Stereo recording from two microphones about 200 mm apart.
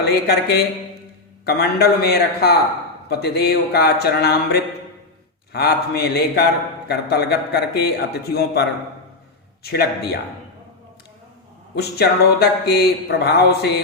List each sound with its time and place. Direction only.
0.0 s a man's voice: 55° left (ahead or behind)
9.6 s speech: 55° left (ahead or behind)
11.7 s speech: 55° left (ahead or behind)